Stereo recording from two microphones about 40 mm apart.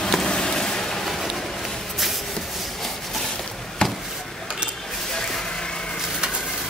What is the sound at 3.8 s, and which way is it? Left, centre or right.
Chop, centre.